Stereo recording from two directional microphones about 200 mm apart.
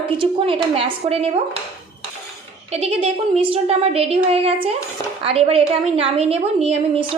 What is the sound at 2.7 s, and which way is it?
A woman's voice, 30° right (ahead or behind).